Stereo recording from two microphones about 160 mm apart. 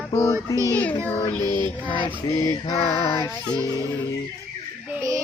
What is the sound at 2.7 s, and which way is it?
Music, 40° left (ahead or behind).